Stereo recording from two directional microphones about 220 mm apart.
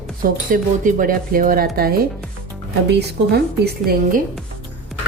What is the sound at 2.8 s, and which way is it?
Speech, 50° right (ahead or behind).